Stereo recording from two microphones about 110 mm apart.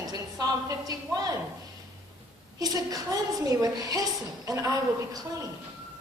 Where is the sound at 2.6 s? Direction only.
35° right (ahead or behind).